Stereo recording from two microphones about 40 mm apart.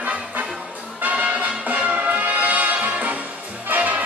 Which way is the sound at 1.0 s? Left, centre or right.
Right.